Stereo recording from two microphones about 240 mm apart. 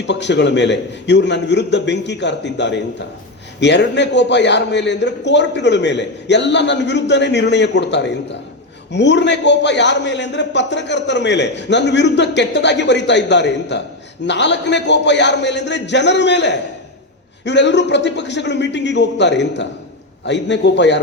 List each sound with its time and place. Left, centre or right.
0.1 s a man's voice: left